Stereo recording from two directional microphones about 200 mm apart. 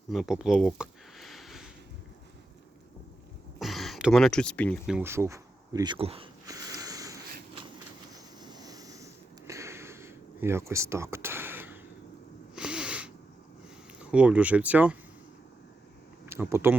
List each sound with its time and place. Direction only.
0.1 s a sound: centre (ahead or behind)
3.6 s speech: centre (ahead or behind)
5.0 s speech: 15° right (ahead or behind)
6.4 s a sound: 20° right (ahead or behind)
8.1 s vehicle: 20° right (ahead or behind)
9.5 s a sound: 15° right (ahead or behind)
12.5 s sneeze: 5° right (ahead or behind)
14.0 s speech: 5° right (ahead or behind)
16.2 s speech: 10° right (ahead or behind)